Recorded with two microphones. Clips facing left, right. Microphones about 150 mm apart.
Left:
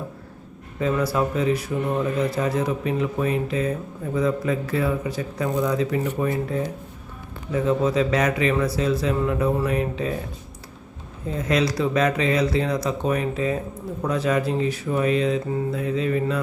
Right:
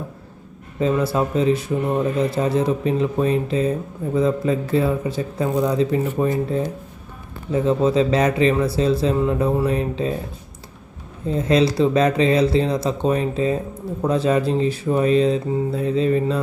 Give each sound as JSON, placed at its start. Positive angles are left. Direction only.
{"t": 0.8, "sound": "speech", "side_deg": -25}
{"t": 7.5, "sound": "speech", "side_deg": -30}
{"t": 11.3, "sound": "speech", "side_deg": -30}